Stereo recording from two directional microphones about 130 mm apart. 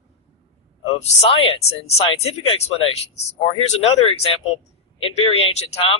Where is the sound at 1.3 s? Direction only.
45° left (ahead or behind).